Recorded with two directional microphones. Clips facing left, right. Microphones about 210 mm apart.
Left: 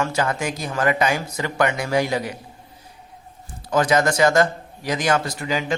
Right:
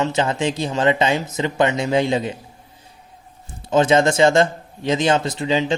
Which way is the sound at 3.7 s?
25° right (ahead or behind).